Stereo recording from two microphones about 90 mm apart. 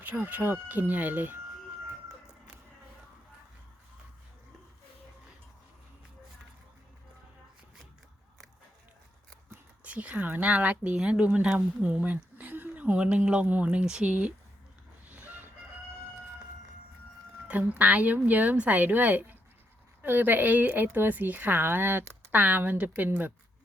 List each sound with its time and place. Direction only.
0.0 s speech: 20° right (ahead or behind)
9.8 s speech: 15° right (ahead or behind)
17.5 s a woman's voice: 15° right (ahead or behind)